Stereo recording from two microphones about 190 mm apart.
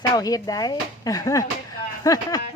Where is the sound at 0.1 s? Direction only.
20° left (ahead or behind).